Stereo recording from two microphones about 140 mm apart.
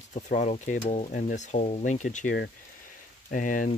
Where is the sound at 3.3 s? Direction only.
70° left (ahead or behind).